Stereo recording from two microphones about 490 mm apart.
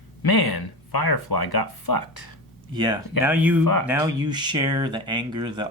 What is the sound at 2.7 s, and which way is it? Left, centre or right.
Speech, centre.